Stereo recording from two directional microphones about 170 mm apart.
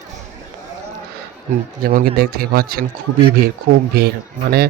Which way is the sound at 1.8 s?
60° right (ahead or behind).